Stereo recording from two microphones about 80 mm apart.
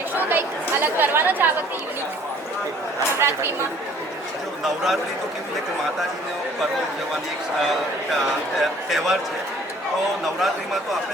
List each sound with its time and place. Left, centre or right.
0.3 s speech: right
3.2 s speech: right
4.6 s a man's voice: centre
7.6 s a man's voice: centre